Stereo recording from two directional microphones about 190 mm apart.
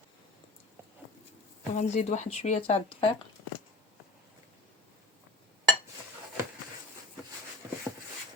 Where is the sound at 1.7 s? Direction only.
35° left (ahead or behind).